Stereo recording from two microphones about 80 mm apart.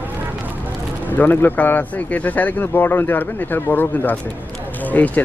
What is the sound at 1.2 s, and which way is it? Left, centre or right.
Speech, left.